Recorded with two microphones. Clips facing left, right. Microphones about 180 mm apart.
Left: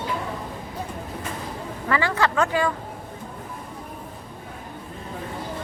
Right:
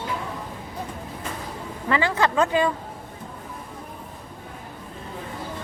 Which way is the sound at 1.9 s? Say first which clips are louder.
Right 1 dB; 20° right (ahead or behind).